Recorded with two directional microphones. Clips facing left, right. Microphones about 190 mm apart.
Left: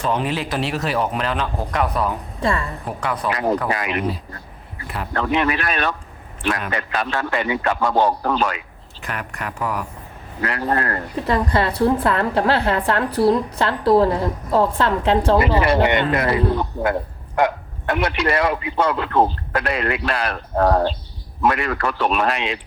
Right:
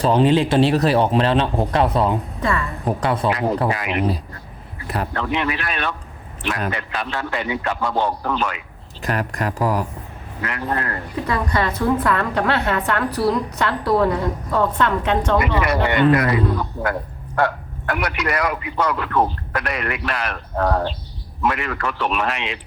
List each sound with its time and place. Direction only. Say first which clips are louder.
0.0 s a man's voice: right 7 dB; 30° right (ahead or behind)
2.4 s a woman's voice: left 3 dB; 30° left (ahead or behind)
2.8 s a man's voice: right 6 dB; 30° right (ahead or behind)
5.1 s a man's voice: left 5 dB; 45° left (ahead or behind)
9.0 s speech: right 6 dB; 40° right (ahead or behind)
10.4 s a man's voice: left 3 dB; 40° left (ahead or behind)
11.3 s a woman's voice: left 3 dB; 30° left (ahead or behind)